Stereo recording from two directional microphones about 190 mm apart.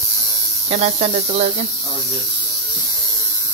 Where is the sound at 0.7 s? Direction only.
35° right (ahead or behind).